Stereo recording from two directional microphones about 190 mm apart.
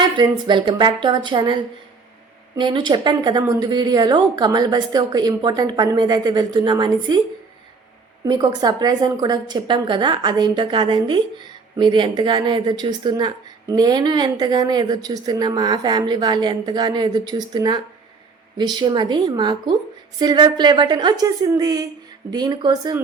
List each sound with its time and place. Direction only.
0.2 s speech: 25° right (ahead or behind)
2.6 s speech: 25° right (ahead or behind)
8.2 s speech: 20° right (ahead or behind)